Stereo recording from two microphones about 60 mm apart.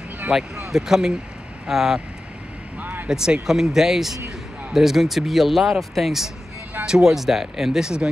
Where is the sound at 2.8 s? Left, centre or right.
Right.